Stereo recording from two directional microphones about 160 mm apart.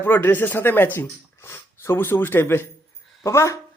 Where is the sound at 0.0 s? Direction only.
15° left (ahead or behind).